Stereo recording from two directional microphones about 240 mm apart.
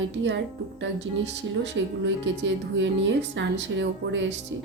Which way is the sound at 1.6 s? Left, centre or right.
Right.